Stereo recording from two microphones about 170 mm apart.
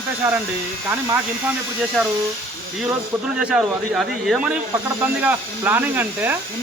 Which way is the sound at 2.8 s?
5° right (ahead or behind).